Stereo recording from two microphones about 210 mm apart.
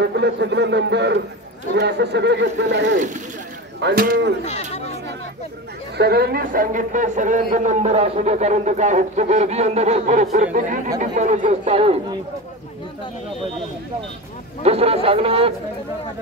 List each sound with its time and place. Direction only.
0.0 s a man's voice: 55° right (ahead or behind)
3.8 s speech: 45° right (ahead or behind)
5.9 s a man's voice: 50° right (ahead or behind); by 12.0 s 30° right (ahead or behind)
14.6 s speech: 30° right (ahead or behind)